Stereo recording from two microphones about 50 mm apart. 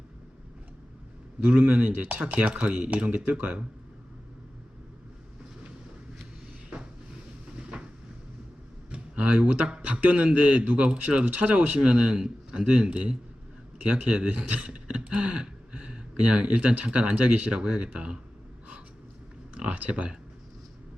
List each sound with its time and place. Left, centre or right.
1.5 s a man's voice: right
7.7 s a sound: right
8.9 s a man's voice: right
19.5 s speech: right